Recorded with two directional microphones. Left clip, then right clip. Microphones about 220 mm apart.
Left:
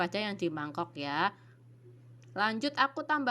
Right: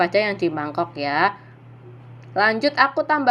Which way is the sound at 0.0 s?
50° left (ahead or behind).